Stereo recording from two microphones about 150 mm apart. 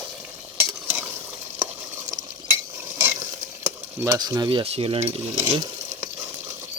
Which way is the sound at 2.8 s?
15° right (ahead or behind).